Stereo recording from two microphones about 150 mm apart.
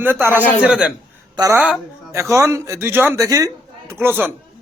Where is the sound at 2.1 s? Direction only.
20° right (ahead or behind).